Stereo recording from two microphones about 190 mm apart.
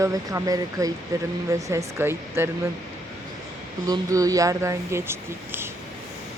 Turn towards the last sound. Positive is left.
turn(degrees=-10)  # may be behind; listen again after turning